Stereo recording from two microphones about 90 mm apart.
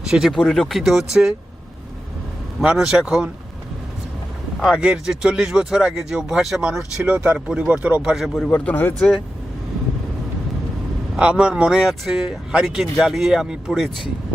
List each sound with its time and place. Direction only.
0.3 s speech: 5° left (ahead or behind)
0.8 s speech: 5° right (ahead or behind)
2.6 s speech: 5° right (ahead or behind)
4.6 s speech: 10° right (ahead or behind)
8.1 s speech: 5° right (ahead or behind)
8.4 s speech: 15° left (ahead or behind)
11.2 s speech: 10° right (ahead or behind)